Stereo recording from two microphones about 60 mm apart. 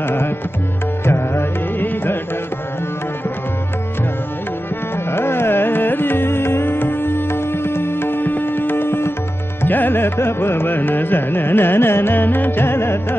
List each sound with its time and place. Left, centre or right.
0.0 s tabla: left
1.0 s music: left
5.1 s carnatic music: left